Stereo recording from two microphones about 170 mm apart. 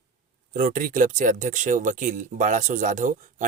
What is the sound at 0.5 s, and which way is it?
Speech, 50° right (ahead or behind).